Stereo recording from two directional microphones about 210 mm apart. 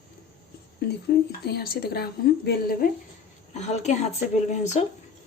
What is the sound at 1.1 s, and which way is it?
A woman's voice, 50° left (ahead or behind).